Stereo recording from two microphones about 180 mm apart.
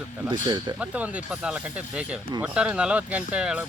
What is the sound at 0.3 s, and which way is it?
Speech, 25° right (ahead or behind).